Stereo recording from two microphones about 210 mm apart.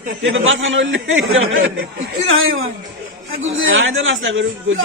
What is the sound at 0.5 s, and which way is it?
A man's voice, 65° right (ahead or behind).